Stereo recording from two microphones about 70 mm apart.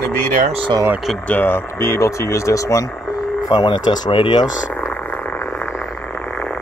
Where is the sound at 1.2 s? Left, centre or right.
Left.